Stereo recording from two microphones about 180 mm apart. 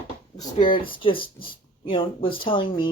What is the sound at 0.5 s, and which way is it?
Speech, 30° left (ahead or behind).